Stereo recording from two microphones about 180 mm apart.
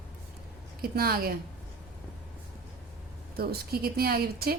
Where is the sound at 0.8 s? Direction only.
55° right (ahead or behind).